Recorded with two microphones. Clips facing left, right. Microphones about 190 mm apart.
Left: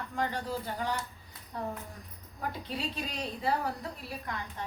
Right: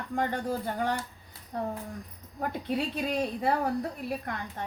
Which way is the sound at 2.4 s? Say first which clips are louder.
Right 6 dB; 55° right (ahead or behind).